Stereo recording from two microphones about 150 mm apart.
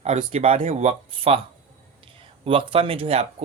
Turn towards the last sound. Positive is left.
turn(degrees=-45)  # may be behind; listen again after turning